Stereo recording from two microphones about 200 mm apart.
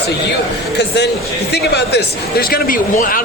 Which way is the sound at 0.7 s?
55° left (ahead or behind).